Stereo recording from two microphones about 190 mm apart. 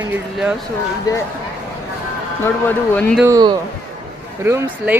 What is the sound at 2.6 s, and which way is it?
Speech, 5° left (ahead or behind).